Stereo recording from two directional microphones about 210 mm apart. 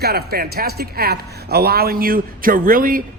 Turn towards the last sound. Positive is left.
turn(degrees=-40)  # may be behind; listen again after turning